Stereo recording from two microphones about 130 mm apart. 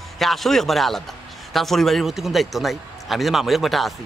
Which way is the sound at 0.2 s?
Centre (ahead or behind).